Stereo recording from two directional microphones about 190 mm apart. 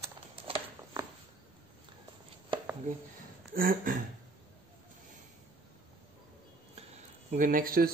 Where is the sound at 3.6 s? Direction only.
50° right (ahead or behind).